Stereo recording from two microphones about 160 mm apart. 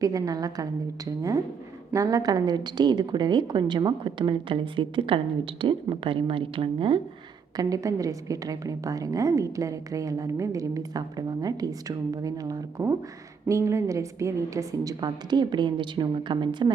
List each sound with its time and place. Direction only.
0.0 s a woman's voice: 20° right (ahead or behind)
7.5 s a woman's voice: 20° right (ahead or behind)